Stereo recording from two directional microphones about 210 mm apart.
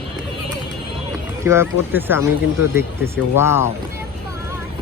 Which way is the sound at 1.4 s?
10° right (ahead or behind).